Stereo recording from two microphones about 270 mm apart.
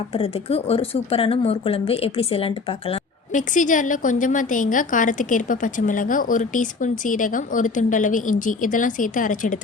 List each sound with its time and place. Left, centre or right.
0.1 s speech: left